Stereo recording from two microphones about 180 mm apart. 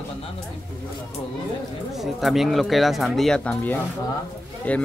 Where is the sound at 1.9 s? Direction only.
Centre (ahead or behind).